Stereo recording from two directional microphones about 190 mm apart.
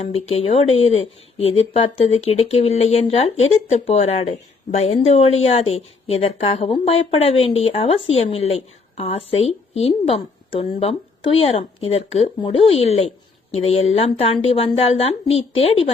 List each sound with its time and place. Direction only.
0.0 s speech: 30° left (ahead or behind)